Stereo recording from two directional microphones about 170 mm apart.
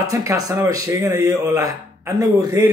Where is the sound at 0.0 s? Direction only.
20° right (ahead or behind).